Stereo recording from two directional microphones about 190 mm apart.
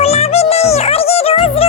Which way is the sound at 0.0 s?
35° left (ahead or behind).